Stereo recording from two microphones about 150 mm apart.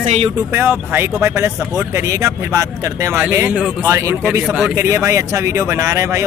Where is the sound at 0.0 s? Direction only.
50° right (ahead or behind).